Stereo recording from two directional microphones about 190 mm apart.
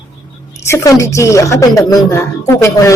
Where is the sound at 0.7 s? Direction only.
15° left (ahead or behind).